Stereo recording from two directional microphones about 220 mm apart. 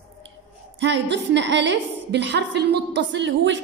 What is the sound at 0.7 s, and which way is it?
A woman's voice, 55° right (ahead or behind).